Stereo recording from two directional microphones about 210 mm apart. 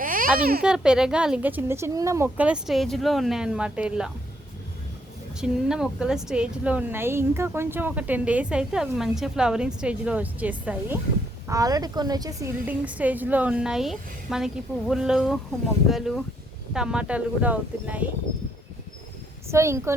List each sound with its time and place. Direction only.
0.0 s a sound: 40° right (ahead or behind)
0.6 s a woman's voice: 5° right (ahead or behind)
5.4 s a woman's voice: 5° right (ahead or behind)
19.5 s a woman's voice: 15° right (ahead or behind)